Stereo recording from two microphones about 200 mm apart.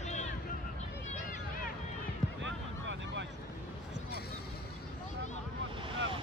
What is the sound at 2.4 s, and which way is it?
Vehicle, 65° right (ahead or behind).